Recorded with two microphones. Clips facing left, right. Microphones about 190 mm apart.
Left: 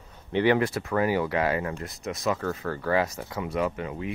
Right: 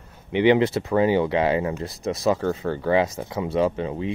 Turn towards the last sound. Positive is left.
turn(degrees=-25)  # may be behind; listen again after turning